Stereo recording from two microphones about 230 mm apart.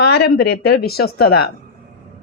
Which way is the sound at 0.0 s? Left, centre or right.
Left.